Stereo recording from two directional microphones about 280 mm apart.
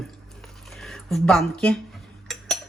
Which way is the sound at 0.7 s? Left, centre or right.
Centre.